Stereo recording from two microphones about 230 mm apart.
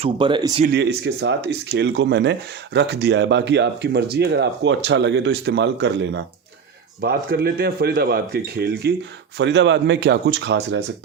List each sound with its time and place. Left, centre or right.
0.0 s speech: right
0.7 s speech: right